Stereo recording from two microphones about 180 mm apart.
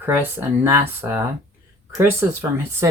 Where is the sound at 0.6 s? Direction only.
15° right (ahead or behind).